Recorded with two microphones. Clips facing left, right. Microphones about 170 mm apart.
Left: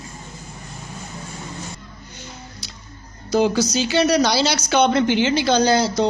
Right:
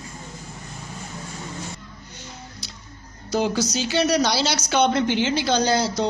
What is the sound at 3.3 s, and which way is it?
A woman's voice, 90° left.